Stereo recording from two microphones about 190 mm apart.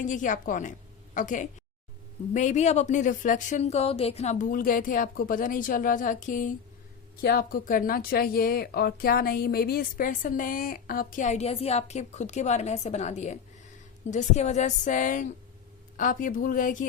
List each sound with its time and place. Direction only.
0.0 s a woman's voice: 40° left (ahead or behind)